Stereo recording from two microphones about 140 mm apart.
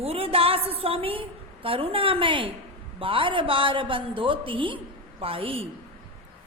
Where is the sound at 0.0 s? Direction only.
45° right (ahead or behind).